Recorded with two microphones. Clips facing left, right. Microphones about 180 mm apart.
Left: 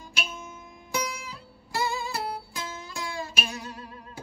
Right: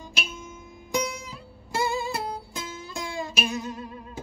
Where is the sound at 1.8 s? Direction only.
25° right (ahead or behind).